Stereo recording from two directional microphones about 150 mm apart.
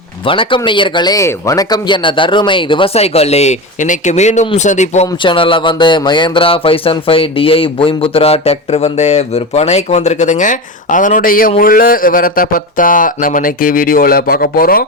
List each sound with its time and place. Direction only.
0.3 s speech: 35° left (ahead or behind); by 5.0 s 50° left (ahead or behind)
5.2 s speech: 35° left (ahead or behind); by 14.8 s 75° left (ahead or behind)